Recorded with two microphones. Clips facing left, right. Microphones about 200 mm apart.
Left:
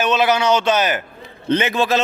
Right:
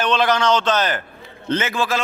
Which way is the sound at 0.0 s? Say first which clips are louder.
Left 1 dB; 10° left (ahead or behind).